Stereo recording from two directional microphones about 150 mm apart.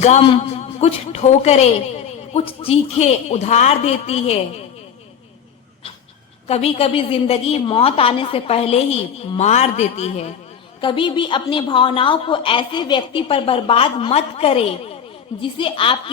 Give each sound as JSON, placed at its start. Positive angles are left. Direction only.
{"t": 0.8, "sound": "a man's voice", "side_deg": 45}
{"t": 6.5, "sound": "a woman's voice", "side_deg": 40}
{"t": 10.8, "sound": "a woman's voice", "side_deg": 35}